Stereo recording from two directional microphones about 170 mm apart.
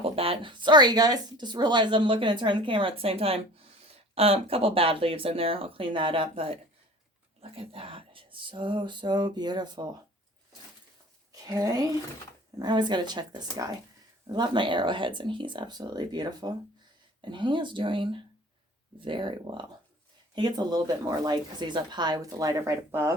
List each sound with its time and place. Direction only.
0.0 s speech: 35° right (ahead or behind)
11.4 s speech: 20° right (ahead or behind)